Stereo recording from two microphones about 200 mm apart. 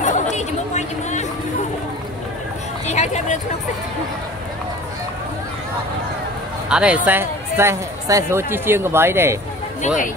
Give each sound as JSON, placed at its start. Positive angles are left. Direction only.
{"t": 0.0, "sound": "chatter", "side_deg": 35}
{"t": 2.9, "sound": "speech", "side_deg": 35}
{"t": 6.7, "sound": "speech", "side_deg": -5}